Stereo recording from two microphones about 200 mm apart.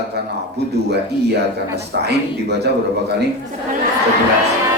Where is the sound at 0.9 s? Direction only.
55° right (ahead or behind).